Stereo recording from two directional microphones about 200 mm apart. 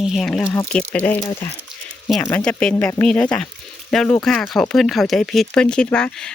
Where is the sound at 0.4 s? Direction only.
15° left (ahead or behind).